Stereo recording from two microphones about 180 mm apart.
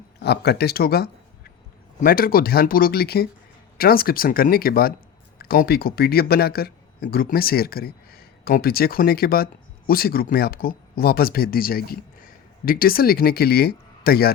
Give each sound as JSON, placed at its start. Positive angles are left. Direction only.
{"t": 0.2, "sound": "speech", "side_deg": 65}